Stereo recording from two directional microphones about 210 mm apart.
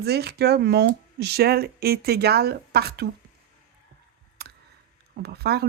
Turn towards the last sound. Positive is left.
turn(degrees=-50)  # may be behind; listen again after turning